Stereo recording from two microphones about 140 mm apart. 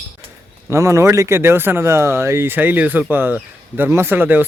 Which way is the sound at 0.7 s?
20° right (ahead or behind).